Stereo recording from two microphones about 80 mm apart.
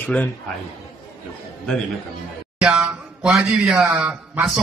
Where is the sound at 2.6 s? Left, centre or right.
Centre.